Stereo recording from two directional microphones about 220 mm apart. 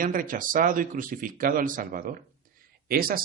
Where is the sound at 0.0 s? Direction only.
40° right (ahead or behind).